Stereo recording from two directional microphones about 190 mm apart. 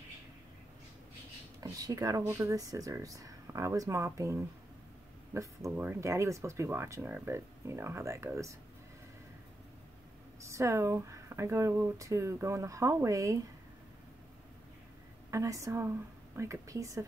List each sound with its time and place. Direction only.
1.6 s speech: 20° right (ahead or behind)
10.4 s speech: 15° right (ahead or behind)
15.3 s speech: 15° right (ahead or behind)